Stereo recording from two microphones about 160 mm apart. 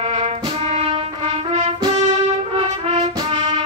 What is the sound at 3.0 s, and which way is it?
Music, 25° right (ahead or behind).